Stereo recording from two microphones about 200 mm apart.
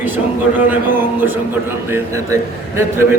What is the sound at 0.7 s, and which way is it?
A man's voice, 10° right (ahead or behind).